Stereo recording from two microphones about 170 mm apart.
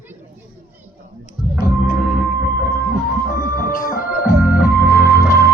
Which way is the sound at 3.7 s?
55° left (ahead or behind).